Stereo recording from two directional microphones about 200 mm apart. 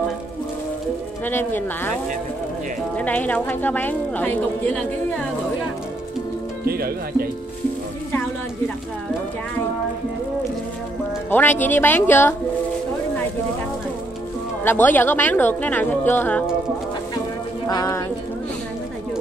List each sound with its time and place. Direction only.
1.2 s a woman's voice: 10° left (ahead or behind)
3.0 s a woman's voice: 10° left (ahead or behind)
6.6 s speech: 50° right (ahead or behind)
11.2 s a woman's voice: 10° left (ahead or behind)
14.6 s a woman's voice: 10° left (ahead or behind)
17.6 s a woman's voice: 15° left (ahead or behind)